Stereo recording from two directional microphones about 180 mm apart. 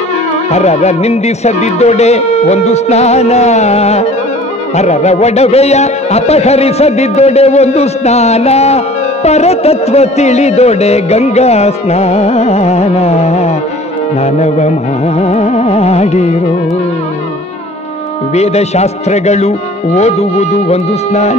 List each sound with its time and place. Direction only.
0.5 s music: 35° left (ahead or behind)
18.3 s music: 35° left (ahead or behind)